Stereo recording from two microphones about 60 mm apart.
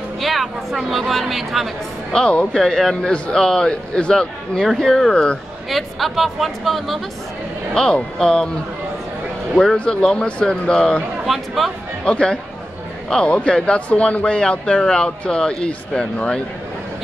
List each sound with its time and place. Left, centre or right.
0.2 s a woman's voice: centre
2.1 s a woman's voice: centre
5.1 s speech: centre
5.7 s a woman's voice: centre
7.7 s speech: centre
9.8 s speech: centre
11.2 s a woman's voice: centre
12.0 s speech: centre